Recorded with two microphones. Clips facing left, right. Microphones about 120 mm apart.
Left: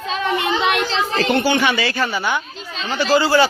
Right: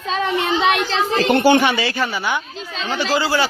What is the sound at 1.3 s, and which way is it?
Speech, 50° right (ahead or behind).